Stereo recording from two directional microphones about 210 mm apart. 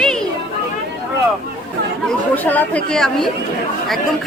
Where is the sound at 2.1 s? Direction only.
10° left (ahead or behind).